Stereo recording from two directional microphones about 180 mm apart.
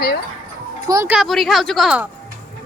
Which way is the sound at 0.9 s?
20° right (ahead or behind).